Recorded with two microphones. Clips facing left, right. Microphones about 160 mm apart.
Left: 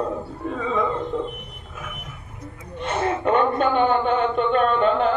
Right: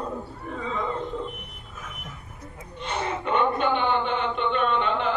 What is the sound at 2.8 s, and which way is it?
A man's voice, 50° left (ahead or behind).